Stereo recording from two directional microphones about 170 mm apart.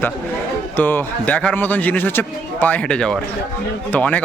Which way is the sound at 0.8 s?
10° left (ahead or behind).